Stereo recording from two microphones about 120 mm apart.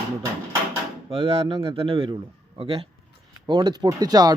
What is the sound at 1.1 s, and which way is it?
Speech, 55° right (ahead or behind).